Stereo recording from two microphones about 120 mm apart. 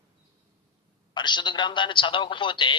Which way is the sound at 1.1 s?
40° left (ahead or behind).